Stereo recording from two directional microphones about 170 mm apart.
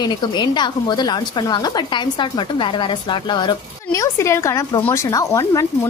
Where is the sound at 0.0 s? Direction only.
25° left (ahead or behind).